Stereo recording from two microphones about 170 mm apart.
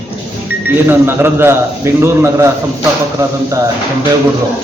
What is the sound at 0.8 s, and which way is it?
Speech, 15° right (ahead or behind).